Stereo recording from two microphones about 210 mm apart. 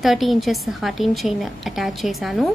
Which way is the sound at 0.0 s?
Centre (ahead or behind).